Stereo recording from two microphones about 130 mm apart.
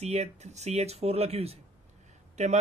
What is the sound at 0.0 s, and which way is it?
Speech, 60° right (ahead or behind).